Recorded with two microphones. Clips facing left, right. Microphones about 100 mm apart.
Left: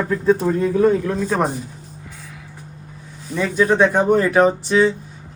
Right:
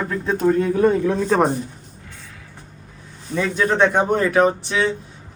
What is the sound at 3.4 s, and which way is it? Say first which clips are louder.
Speech: left 2 dB; 5° left (ahead or behind).